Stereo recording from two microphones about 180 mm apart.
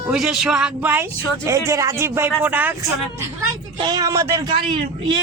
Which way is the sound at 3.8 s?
20° right (ahead or behind).